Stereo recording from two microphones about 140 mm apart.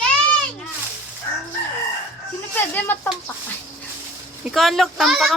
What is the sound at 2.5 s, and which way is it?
Speech, 15° left (ahead or behind).